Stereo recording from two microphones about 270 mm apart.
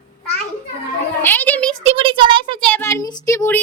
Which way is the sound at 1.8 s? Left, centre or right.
Centre.